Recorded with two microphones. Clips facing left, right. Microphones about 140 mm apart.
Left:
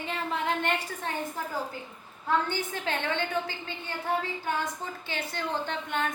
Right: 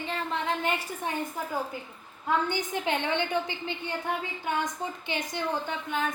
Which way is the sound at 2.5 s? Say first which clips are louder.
Right 3 dB; 20° right (ahead or behind).